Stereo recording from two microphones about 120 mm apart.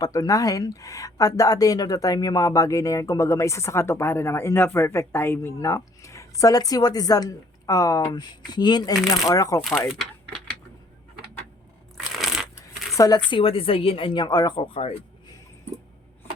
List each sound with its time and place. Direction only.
0.0 s speech: 30° left (ahead or behind)
9.6 s speech: centre (ahead or behind)
11.9 s crushing: centre (ahead or behind)
12.9 s speech: 30° left (ahead or behind); by 15.0 s 55° left (ahead or behind)